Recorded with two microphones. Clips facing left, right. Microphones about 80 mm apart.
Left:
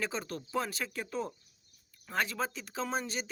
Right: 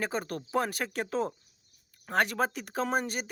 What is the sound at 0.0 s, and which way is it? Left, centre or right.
Speech, right.